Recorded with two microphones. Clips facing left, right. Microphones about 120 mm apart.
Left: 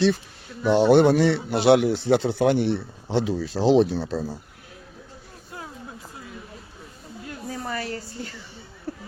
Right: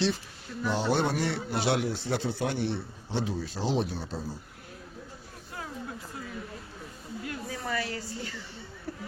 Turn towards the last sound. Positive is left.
turn(degrees=40)  # may be behind; listen again after turning